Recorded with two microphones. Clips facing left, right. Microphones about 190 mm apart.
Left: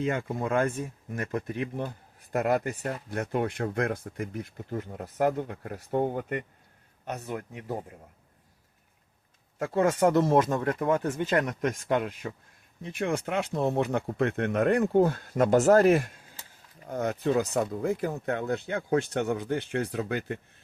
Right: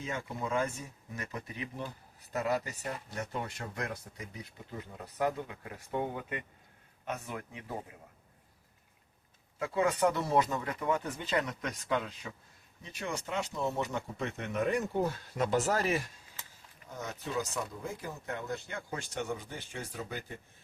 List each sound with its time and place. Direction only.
0.0 s speech: 55° left (ahead or behind)
9.6 s speech: 45° left (ahead or behind); by 20.4 s 65° left (ahead or behind)